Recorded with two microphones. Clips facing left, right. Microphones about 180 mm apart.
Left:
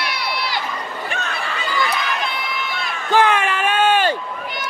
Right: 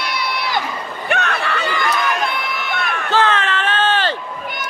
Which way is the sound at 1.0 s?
70° right (ahead or behind).